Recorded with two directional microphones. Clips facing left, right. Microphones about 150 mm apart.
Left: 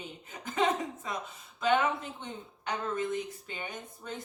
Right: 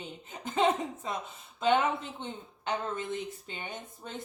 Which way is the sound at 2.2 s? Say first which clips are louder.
Right 2 dB; 25° right (ahead or behind).